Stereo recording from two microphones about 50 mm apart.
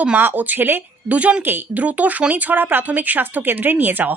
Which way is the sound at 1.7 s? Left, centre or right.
Right.